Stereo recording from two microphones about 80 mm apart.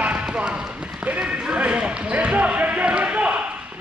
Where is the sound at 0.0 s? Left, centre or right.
Centre.